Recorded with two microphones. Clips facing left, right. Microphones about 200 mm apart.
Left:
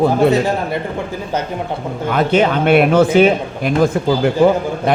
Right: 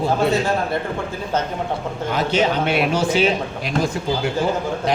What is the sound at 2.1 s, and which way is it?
A man's voice, 55° left (ahead or behind).